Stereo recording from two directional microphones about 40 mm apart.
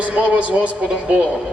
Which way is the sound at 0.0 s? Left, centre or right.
Right.